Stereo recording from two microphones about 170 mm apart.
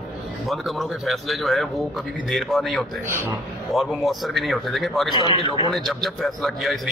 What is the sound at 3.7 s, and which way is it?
A man's voice, centre (ahead or behind).